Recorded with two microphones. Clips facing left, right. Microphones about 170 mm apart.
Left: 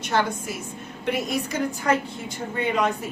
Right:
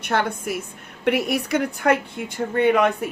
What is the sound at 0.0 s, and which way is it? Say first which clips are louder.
A woman's voice: right 1 dB; 60° right (ahead or behind).